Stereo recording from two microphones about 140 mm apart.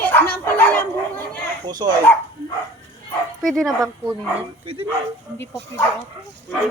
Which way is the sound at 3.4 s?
Centre (ahead or behind).